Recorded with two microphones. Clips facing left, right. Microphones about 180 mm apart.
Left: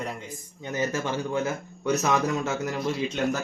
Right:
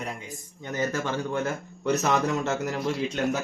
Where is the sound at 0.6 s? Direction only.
15° left (ahead or behind).